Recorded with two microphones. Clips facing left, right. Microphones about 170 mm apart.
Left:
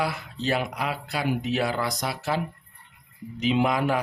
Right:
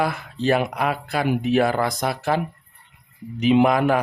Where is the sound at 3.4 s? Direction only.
60° right (ahead or behind).